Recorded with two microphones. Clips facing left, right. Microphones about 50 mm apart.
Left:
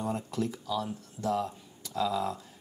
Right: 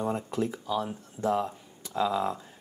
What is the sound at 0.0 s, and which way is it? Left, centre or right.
Speech, right.